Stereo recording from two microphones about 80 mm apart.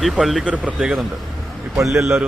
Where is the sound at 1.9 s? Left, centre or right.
Right.